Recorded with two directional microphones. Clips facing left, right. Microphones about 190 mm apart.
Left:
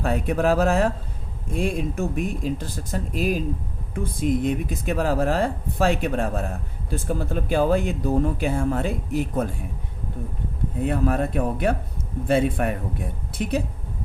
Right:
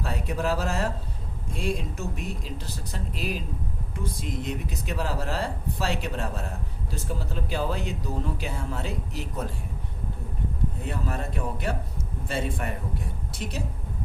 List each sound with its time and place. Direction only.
0.0 s speech: 55° left (ahead or behind)
10.8 s speech: 55° left (ahead or behind)